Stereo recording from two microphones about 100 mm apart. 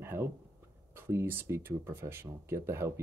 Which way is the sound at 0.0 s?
25° right (ahead or behind).